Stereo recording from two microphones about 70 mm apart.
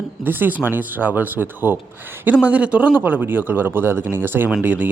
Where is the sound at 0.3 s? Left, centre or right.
Right.